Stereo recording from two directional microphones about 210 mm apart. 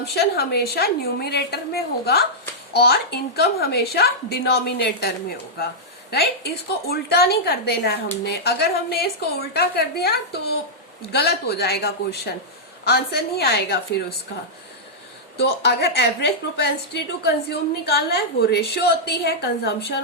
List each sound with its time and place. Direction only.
0.0 s a woman's voice: 50° left (ahead or behind)
15.4 s a woman's voice: 50° left (ahead or behind)